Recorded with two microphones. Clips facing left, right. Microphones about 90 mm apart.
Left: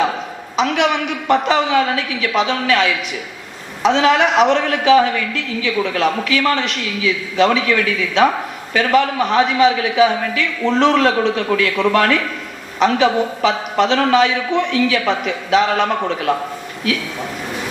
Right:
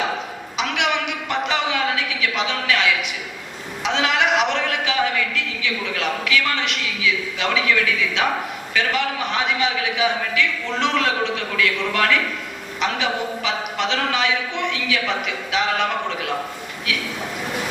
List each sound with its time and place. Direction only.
0.5 s a man's voice: 40° left (ahead or behind)